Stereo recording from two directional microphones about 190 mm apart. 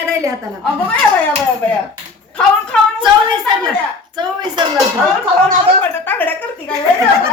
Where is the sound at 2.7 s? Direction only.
5° left (ahead or behind).